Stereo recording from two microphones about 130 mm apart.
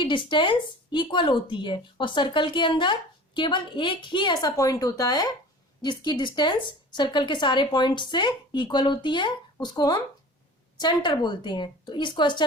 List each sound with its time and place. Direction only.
0.0 s speech: 35° left (ahead or behind)